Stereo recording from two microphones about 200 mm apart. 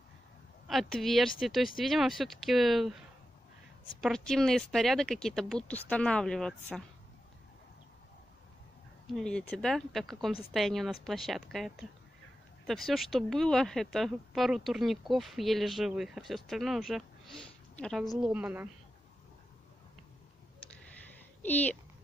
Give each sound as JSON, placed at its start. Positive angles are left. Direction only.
{"t": 0.7, "sound": "speech", "side_deg": 0}
{"t": 4.0, "sound": "speech", "side_deg": 0}
{"t": 9.0, "sound": "speech", "side_deg": 5}
{"t": 18.2, "sound": "a woman's voice", "side_deg": -5}
{"t": 21.4, "sound": "speech", "side_deg": 10}